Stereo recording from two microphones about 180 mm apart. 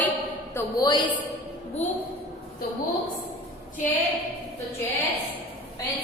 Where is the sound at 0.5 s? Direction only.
20° left (ahead or behind).